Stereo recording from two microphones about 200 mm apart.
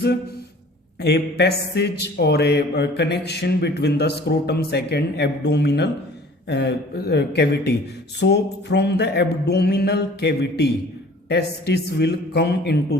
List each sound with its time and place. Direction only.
1.0 s a man's voice: 55° left (ahead or behind)